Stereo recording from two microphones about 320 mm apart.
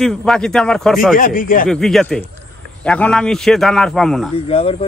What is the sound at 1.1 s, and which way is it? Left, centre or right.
Speech, left.